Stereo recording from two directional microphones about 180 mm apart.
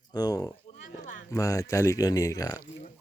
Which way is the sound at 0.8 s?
45° left (ahead or behind).